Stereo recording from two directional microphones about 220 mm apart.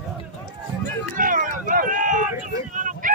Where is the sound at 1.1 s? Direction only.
40° right (ahead or behind).